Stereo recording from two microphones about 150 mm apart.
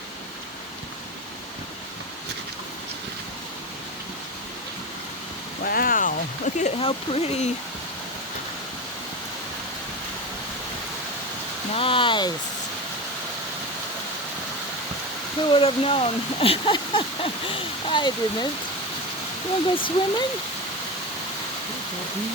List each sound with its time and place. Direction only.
5.6 s speech: 75° left (ahead or behind); by 7.5 s 45° left (ahead or behind)
11.7 s a sound: 35° left (ahead or behind)
15.5 s speech: 40° left (ahead or behind)
19.7 s speech: 35° left (ahead or behind)